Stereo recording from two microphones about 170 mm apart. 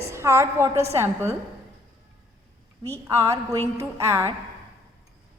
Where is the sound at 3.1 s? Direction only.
15° right (ahead or behind).